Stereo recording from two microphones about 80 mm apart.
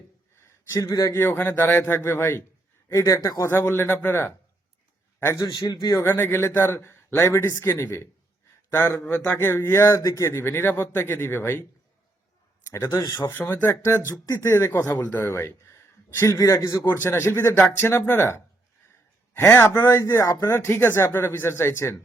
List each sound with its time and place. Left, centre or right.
0.3 s a sound: left
0.9 s speech: left
1.1 s speech: left
2.9 s speech: left
3.5 s speech: left
12.9 s speech: left
13.2 s speech: left
13.8 s speech: left
14.9 s speech: left
16.9 s speech: left